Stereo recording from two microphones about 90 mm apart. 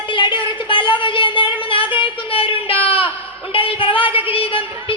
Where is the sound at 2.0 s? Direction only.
90° left.